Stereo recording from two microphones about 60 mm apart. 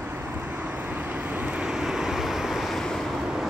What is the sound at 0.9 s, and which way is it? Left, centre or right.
Vehicle, right.